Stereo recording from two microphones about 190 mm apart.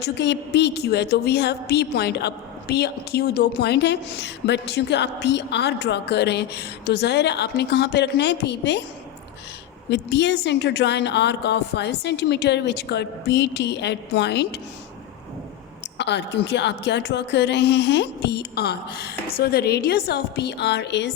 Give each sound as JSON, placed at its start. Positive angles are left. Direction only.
{"t": 0.0, "sound": "a woman's voice", "side_deg": 65}
{"t": 9.9, "sound": "a woman's voice", "side_deg": 65}
{"t": 16.0, "sound": "a woman's voice", "side_deg": 65}